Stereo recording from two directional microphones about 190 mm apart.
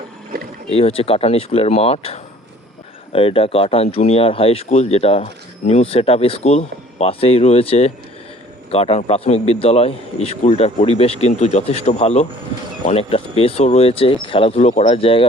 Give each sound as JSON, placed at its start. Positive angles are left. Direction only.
{"t": 0.7, "sound": "speech", "side_deg": 30}